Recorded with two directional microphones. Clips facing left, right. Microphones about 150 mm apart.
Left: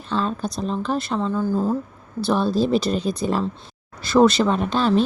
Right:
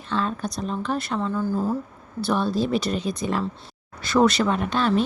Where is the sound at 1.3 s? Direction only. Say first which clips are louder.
Left 3 dB; 15° left (ahead or behind).